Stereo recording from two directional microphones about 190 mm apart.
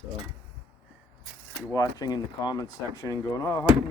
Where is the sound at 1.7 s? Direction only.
20° left (ahead or behind).